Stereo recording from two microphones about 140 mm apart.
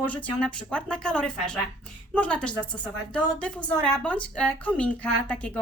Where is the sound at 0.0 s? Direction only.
10° left (ahead or behind).